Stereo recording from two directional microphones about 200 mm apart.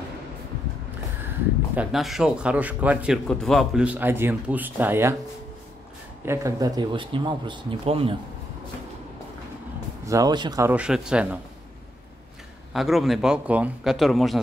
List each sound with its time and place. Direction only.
1.8 s speech: centre (ahead or behind)
6.2 s speech: 15° right (ahead or behind)
10.0 s speech: 20° right (ahead or behind)
10.7 s speech: 5° right (ahead or behind)
12.7 s speech: centre (ahead or behind)